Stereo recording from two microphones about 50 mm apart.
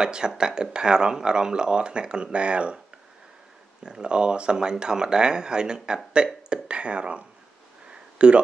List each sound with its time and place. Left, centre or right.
0.0 s speech: centre
3.8 s speech: centre
7.9 s a sound: right